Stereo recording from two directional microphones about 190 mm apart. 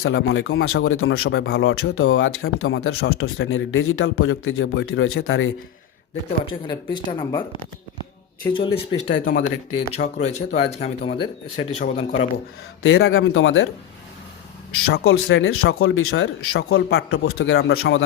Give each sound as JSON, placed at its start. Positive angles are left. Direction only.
{"t": 0.0, "sound": "a man's voice", "side_deg": 90}
{"t": 6.4, "sound": "speech", "side_deg": 25}
{"t": 8.5, "sound": "speech", "side_deg": 25}
{"t": 9.2, "sound": "speech", "side_deg": 45}
{"t": 12.8, "sound": "a man's voice", "side_deg": 90}
{"t": 14.8, "sound": "a man's voice", "side_deg": 90}